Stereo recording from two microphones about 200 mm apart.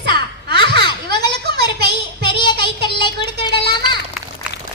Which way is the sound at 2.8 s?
25° left (ahead or behind).